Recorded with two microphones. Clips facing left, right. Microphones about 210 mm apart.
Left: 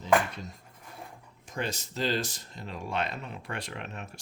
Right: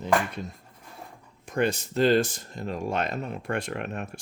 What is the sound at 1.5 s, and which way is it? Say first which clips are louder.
Speech: right 9 dB; 55° right (ahead or behind).